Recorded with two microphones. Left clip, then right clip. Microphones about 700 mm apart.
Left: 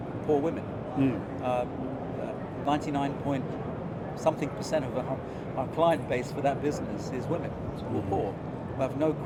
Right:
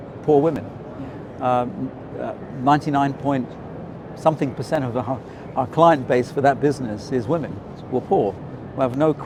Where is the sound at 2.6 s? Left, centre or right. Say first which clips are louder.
Right 11 dB; right.